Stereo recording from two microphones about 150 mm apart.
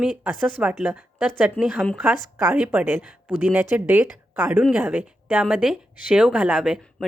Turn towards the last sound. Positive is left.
turn(degrees=-5)  # may be behind; listen again after turning